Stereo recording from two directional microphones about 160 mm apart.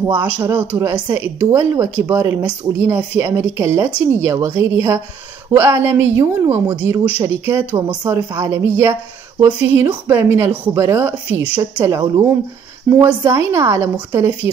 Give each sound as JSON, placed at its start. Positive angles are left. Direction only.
{"t": 0.5, "sound": "speech", "side_deg": -10}
{"t": 5.5, "sound": "speech", "side_deg": -15}